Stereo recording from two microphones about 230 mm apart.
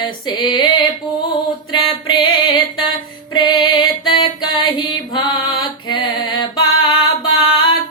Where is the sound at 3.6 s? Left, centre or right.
Left.